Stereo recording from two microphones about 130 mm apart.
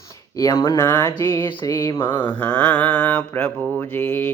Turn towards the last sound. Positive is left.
turn(degrees=15)  # may be behind; listen again after turning